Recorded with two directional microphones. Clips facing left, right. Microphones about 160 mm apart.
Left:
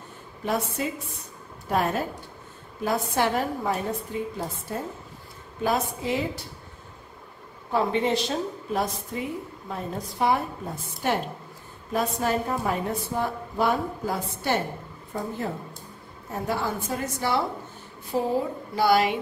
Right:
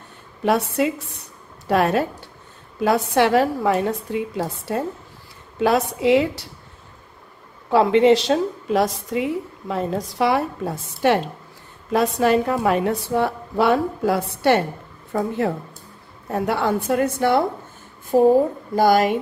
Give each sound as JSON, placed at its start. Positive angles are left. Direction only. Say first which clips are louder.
{"t": 0.4, "sound": "a woman's voice", "louder": "right 8 dB", "side_deg": -80}
{"t": 7.7, "sound": "a woman's voice", "louder": "right 9 dB", "side_deg": -90}